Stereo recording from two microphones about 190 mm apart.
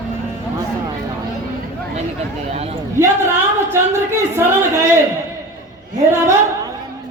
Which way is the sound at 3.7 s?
15° right (ahead or behind).